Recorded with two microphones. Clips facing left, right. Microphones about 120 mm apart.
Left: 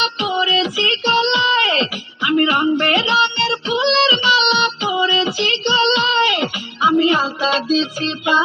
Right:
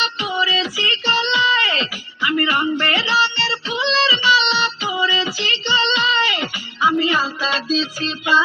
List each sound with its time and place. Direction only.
0.0 s music: 20° left (ahead or behind)
3.8 s child singing: 20° left (ahead or behind)
7.8 s music: 20° left (ahead or behind)